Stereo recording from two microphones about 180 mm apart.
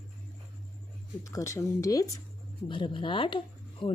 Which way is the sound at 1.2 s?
15° left (ahead or behind).